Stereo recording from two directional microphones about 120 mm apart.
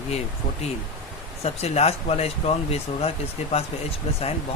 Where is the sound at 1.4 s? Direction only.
60° left (ahead or behind).